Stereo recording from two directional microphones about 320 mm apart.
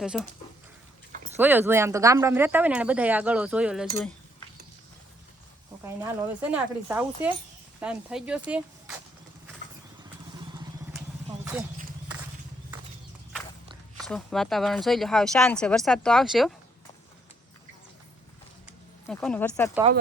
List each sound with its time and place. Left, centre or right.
0.0 s speech: centre
1.1 s a sound: right
1.4 s speech: centre
5.8 s speech: centre
14.0 s speech: centre
18.6 s a sound: centre